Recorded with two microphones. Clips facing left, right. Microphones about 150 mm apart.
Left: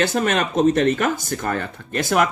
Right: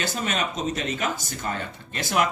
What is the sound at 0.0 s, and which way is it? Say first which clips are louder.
Speech: left 8 dB; 60° left (ahead or behind).